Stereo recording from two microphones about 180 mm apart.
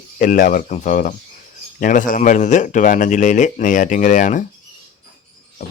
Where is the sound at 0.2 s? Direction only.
45° left (ahead or behind).